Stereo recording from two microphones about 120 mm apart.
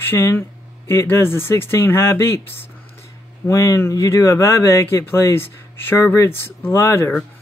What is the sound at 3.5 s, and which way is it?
Speech, 25° left (ahead or behind).